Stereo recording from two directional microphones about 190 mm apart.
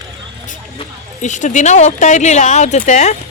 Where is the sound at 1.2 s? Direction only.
40° left (ahead or behind).